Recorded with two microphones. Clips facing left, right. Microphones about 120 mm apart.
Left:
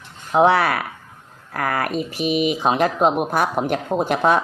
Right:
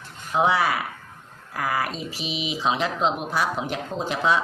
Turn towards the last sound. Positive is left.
turn(degrees=55)  # may be behind; listen again after turning